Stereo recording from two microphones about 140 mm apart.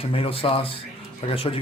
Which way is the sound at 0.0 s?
40° left (ahead or behind).